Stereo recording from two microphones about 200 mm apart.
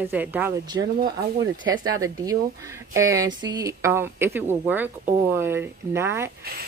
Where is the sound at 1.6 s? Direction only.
20° right (ahead or behind).